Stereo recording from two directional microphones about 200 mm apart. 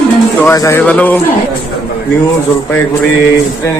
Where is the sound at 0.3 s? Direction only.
15° left (ahead or behind).